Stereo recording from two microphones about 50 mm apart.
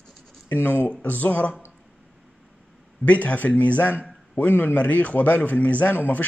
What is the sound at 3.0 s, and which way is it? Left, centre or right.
A man's voice, left.